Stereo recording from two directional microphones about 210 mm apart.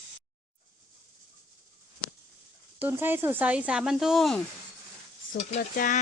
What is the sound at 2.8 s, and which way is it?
Speech, 10° right (ahead or behind).